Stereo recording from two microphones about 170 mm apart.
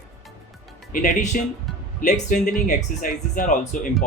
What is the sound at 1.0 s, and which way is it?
Speech, 45° left (ahead or behind).